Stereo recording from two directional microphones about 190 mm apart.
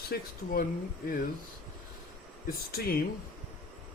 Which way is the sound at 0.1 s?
55° left (ahead or behind).